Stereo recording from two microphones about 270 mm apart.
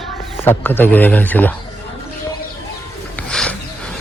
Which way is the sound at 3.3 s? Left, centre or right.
Centre.